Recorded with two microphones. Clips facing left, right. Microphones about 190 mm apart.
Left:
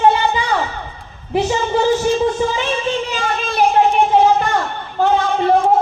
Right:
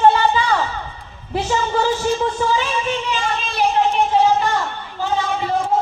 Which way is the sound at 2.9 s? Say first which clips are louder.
Left 2 dB; 40° left (ahead or behind).